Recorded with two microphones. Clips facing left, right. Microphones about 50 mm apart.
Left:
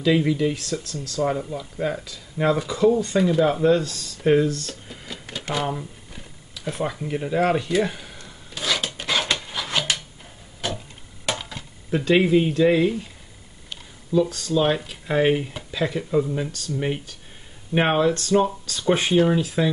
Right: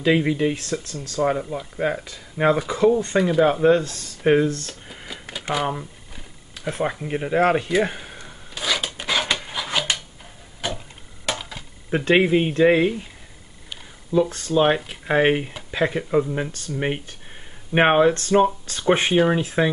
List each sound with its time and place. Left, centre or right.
0.0 s speech: right
3.6 s speech: right
5.0 s a sound: centre
5.5 s speech: centre
6.6 s speech: right
8.5 s filing: centre
10.6 s tick-tock: centre
11.2 s a sound: centre
11.9 s speech: right
14.3 s speech: right
17.7 s speech: right